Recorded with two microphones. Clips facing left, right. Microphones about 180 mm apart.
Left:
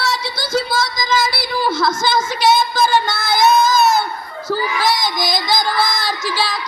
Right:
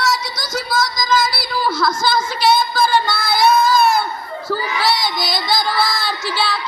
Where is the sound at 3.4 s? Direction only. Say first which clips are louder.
Left 1 dB; 20° left (ahead or behind).